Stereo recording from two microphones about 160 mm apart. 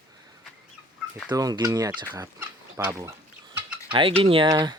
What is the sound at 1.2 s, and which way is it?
Speech, 25° right (ahead or behind).